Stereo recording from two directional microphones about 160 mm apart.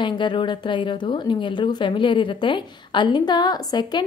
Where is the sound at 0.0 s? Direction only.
30° left (ahead or behind).